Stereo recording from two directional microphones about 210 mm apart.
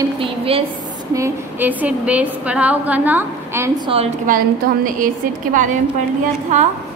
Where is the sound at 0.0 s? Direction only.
25° right (ahead or behind).